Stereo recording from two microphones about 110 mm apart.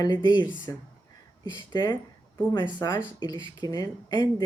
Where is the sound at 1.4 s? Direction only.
40° left (ahead or behind).